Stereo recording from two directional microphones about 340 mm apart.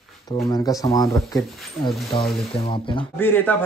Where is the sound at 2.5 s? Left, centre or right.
Centre.